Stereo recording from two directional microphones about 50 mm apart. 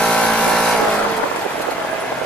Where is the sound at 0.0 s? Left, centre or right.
Centre.